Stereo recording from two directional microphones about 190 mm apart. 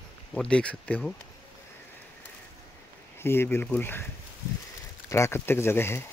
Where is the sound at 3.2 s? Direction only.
10° left (ahead or behind).